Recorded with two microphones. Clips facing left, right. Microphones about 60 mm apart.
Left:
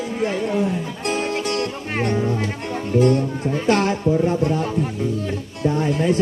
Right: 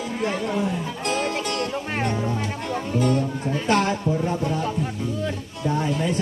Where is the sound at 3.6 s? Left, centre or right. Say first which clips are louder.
Left 2 dB; left.